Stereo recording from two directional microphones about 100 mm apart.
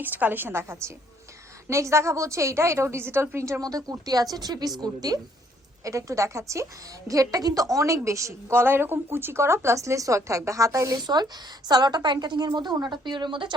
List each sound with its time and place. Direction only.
0.0 s a woman's voice: 20° right (ahead or behind); by 13.5 s 55° right (ahead or behind)